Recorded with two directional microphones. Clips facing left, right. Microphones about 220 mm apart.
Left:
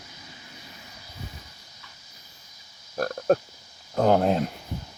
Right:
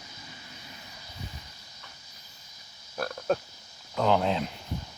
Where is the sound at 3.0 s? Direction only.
45° left (ahead or behind).